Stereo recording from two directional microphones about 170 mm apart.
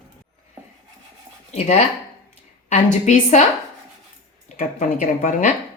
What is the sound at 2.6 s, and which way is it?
Speech, 45° left (ahead or behind).